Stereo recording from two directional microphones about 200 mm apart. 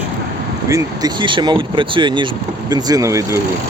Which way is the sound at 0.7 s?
20° right (ahead or behind).